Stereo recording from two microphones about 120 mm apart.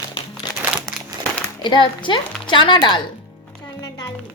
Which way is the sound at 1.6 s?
40° left (ahead or behind).